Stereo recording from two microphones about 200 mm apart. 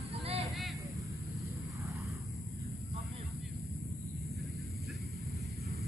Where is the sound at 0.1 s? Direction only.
30° right (ahead or behind).